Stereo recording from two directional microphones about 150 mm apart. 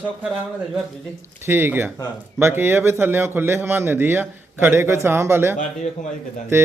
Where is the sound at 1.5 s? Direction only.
15° right (ahead or behind).